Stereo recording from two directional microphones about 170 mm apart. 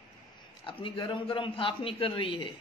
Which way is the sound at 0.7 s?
30° left (ahead or behind).